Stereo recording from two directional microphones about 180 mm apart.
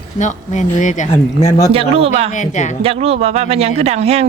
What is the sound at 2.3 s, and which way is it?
Speech, 45° left (ahead or behind).